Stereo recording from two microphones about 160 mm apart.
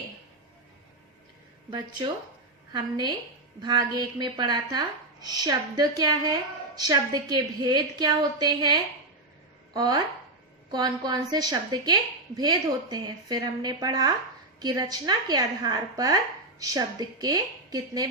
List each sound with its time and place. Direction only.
3.6 s a woman's voice: 25° right (ahead or behind)